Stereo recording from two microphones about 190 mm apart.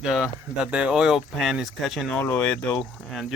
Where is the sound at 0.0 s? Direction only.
5° right (ahead or behind).